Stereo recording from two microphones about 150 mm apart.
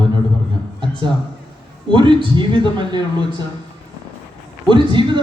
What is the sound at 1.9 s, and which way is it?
A man's voice, 35° right (ahead or behind).